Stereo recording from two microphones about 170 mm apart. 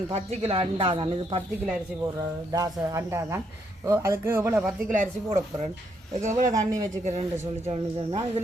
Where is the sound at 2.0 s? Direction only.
20° right (ahead or behind).